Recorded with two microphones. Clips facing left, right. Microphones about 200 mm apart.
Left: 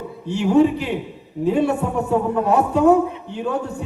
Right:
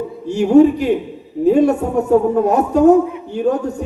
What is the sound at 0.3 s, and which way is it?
A man's voice, 45° right (ahead or behind).